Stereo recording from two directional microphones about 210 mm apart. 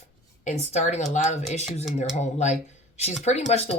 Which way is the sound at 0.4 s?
35° left (ahead or behind).